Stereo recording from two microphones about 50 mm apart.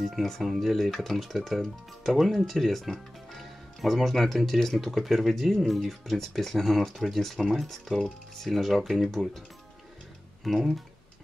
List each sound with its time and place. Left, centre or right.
0.0 s speech: centre
10.4 s speech: centre